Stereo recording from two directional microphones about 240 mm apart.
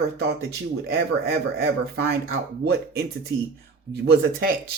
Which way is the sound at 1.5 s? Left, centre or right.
Right.